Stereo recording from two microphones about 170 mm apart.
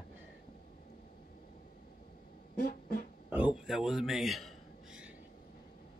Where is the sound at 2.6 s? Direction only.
60° left (ahead or behind).